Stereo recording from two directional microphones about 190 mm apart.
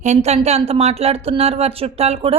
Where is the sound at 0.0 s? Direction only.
35° right (ahead or behind).